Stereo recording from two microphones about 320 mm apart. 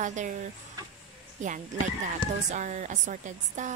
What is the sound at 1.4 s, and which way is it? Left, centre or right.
Speech, right.